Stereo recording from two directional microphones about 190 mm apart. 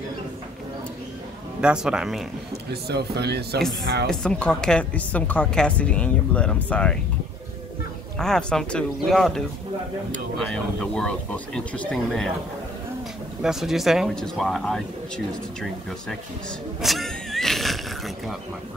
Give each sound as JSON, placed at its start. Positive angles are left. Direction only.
{"t": 1.6, "sound": "a woman's voice", "side_deg": -5}
{"t": 2.7, "sound": "speech", "side_deg": -60}
{"t": 4.1, "sound": "a woman's voice", "side_deg": 5}
{"t": 8.2, "sound": "a woman's voice", "side_deg": 5}
{"t": 10.5, "sound": "a woman's voice", "side_deg": 5}
{"t": 13.4, "sound": "a woman's voice", "side_deg": 0}
{"t": 16.8, "sound": "a sound", "side_deg": 0}